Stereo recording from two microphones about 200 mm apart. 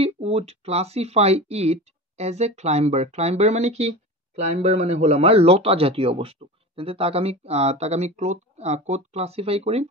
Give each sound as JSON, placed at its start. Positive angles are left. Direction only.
{"t": 0.0, "sound": "speech", "side_deg": -30}